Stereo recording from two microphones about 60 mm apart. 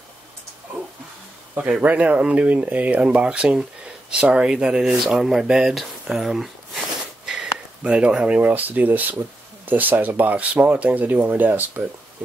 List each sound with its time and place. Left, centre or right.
1.6 s speech: right